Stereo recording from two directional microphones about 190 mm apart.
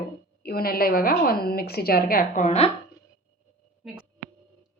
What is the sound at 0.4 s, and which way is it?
A woman's voice, 55° left (ahead or behind).